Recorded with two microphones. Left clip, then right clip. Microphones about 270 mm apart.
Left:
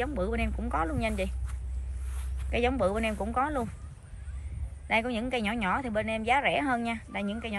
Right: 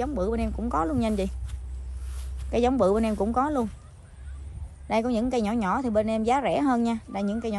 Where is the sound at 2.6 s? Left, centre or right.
Centre.